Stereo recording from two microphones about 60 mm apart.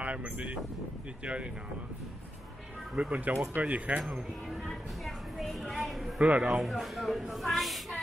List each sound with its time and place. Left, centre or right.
0.0 s speech: right
3.0 s speech: right
4.6 s a woman's voice: centre
6.1 s speech: centre
6.6 s a woman's voice: centre